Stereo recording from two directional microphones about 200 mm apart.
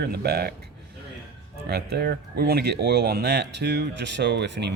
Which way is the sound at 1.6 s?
55° right (ahead or behind).